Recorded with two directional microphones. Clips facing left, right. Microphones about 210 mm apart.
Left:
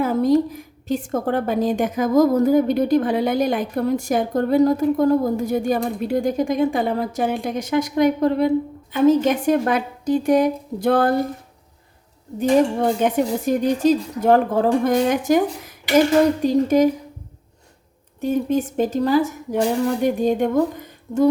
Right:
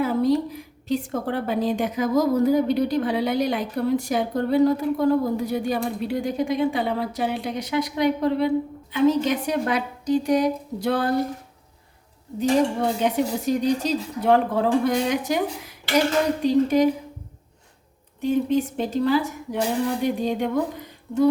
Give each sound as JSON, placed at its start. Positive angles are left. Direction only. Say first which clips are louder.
{"t": 0.0, "sound": "a woman's voice", "louder": "left 3 dB", "side_deg": 45}
{"t": 12.4, "sound": "a woman's voice", "louder": "left 3 dB", "side_deg": 50}
{"t": 18.2, "sound": "a woman's voice", "louder": "left 1 dB", "side_deg": 45}